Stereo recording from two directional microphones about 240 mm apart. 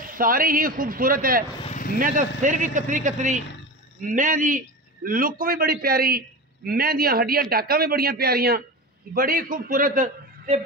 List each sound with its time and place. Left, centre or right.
0.0 s a man's voice: right
1.6 s a sound: left
2.0 s a man's voice: right